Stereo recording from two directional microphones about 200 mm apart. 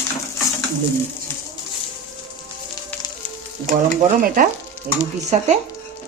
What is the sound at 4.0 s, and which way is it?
Speech, 40° right (ahead or behind).